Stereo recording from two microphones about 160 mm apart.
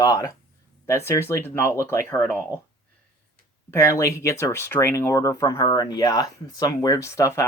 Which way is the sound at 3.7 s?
15° left (ahead or behind).